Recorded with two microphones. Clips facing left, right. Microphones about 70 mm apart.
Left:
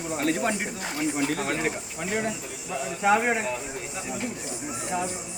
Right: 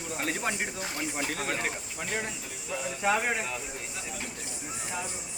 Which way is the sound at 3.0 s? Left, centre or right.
Left.